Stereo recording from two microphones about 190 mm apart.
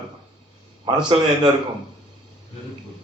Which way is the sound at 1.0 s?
25° right (ahead or behind).